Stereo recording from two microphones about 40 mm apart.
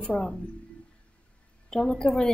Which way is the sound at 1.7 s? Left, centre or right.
Centre.